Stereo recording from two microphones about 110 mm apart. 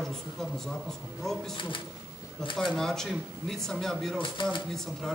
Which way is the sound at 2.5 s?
5° left (ahead or behind).